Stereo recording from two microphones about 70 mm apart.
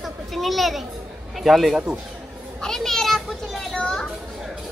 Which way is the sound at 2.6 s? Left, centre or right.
Centre.